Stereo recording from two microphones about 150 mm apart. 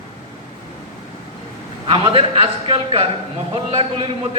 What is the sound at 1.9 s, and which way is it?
A man's voice, 35° right (ahead or behind).